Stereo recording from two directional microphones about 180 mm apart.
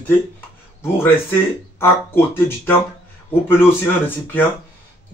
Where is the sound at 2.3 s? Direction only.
15° left (ahead or behind).